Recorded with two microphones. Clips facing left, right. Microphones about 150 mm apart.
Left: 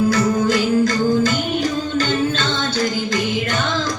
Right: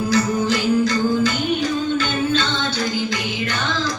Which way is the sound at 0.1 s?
50° left (ahead or behind).